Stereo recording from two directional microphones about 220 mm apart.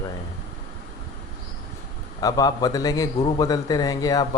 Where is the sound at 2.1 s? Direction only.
15° left (ahead or behind).